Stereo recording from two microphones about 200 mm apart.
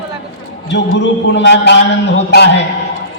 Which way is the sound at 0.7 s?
60° left (ahead or behind).